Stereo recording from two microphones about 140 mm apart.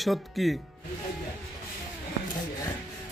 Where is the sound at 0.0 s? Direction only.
Centre (ahead or behind).